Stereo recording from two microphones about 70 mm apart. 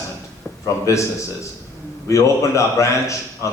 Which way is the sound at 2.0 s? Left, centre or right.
Left.